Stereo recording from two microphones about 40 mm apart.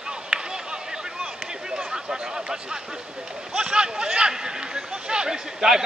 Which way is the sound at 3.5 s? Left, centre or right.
Right.